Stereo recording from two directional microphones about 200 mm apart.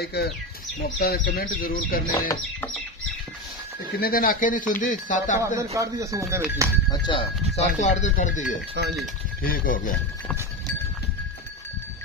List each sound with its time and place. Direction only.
0.0 s speech: 55° left (ahead or behind)
2.1 s speech: 15° left (ahead or behind)
3.9 s speech: 45° left (ahead or behind)
5.6 s speech: 15° right (ahead or behind)
6.9 s speech: 25° left (ahead or behind); by 9.9 s 45° left (ahead or behind)